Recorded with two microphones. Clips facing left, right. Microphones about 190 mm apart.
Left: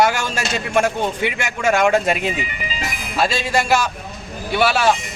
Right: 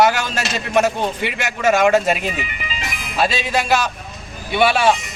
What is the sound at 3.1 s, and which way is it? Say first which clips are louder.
Speech: even; 10° left (ahead or behind).